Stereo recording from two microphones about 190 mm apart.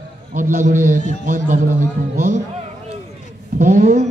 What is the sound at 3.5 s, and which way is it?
Speech, 40° right (ahead or behind).